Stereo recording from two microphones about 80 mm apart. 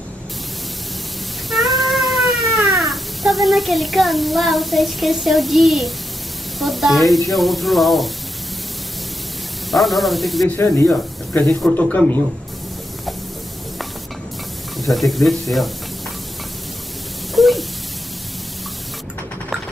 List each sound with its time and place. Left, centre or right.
1.5 s a sound: centre
2.7 s speech: centre
9.7 s speech: centre
10.6 s speech: left
14.8 s speech: centre
17.4 s a sound: centre